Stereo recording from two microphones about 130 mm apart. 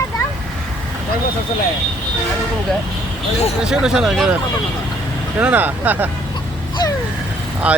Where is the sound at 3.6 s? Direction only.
5° right (ahead or behind).